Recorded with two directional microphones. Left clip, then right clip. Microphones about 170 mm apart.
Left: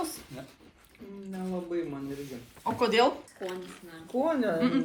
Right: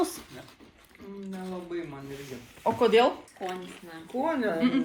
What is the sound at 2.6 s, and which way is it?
Speech, 10° right (ahead or behind).